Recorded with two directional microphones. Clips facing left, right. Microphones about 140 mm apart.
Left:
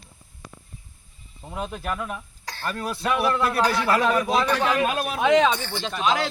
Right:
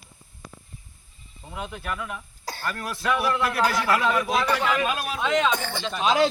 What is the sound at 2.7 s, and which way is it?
Speech, 15° left (ahead or behind).